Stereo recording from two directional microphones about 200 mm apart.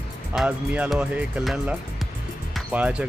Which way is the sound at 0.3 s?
5° right (ahead or behind).